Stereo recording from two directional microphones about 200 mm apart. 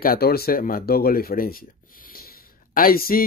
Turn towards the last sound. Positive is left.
turn(degrees=45)  # may be behind; listen again after turning